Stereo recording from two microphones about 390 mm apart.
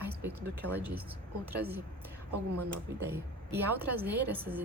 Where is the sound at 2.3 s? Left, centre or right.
Right.